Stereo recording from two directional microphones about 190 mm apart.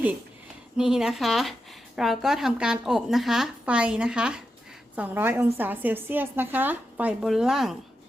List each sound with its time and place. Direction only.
0.8 s a woman's voice: centre (ahead or behind)